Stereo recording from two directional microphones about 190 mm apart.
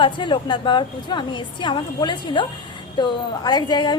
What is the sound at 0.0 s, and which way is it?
A woman's voice, 25° left (ahead or behind).